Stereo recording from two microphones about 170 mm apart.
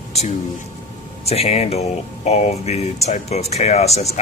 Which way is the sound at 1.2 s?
35° left (ahead or behind).